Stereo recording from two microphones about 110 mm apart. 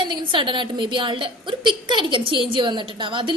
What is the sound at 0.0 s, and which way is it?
A woman's voice, 45° right (ahead or behind).